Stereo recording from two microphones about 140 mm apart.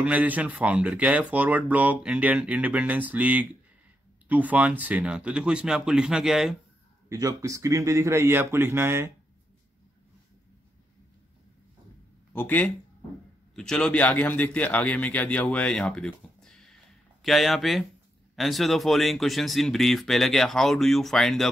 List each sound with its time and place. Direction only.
0.0 s speech: 10° right (ahead or behind)
7.1 s a man's voice: 25° right (ahead or behind)
12.3 s a man's voice: 15° left (ahead or behind)